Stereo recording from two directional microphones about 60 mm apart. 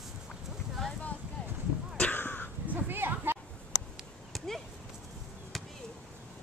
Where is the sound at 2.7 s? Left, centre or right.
Right.